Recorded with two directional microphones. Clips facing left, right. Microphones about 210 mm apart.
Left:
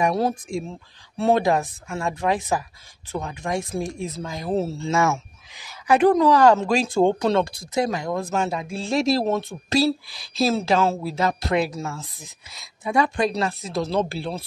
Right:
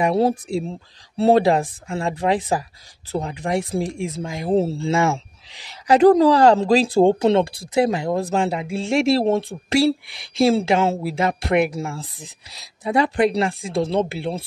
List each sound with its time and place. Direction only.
0.0 s speech: 30° right (ahead or behind)